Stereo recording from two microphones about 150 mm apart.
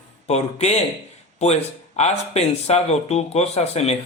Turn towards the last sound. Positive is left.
turn(degrees=45)  # may be behind; listen again after turning